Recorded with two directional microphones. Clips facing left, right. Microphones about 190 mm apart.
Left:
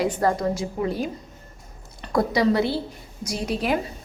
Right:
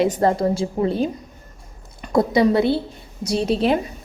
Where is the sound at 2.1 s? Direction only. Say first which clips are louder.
Right 4 dB; 25° right (ahead or behind).